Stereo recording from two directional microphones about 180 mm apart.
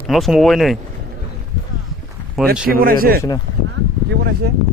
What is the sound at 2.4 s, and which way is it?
Speech, centre (ahead or behind).